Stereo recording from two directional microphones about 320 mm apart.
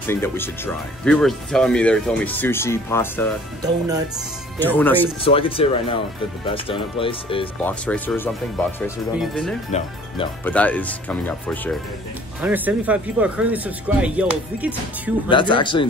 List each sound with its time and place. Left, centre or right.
0.0 s speech: centre
4.6 s speech: centre
5.2 s speech: centre
7.6 s speech: centre
9.7 s speech: centre
10.4 s speech: centre
12.4 s speech: centre
15.2 s speech: centre